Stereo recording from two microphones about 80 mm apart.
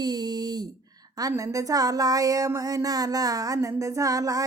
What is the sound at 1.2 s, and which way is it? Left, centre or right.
Speech, right.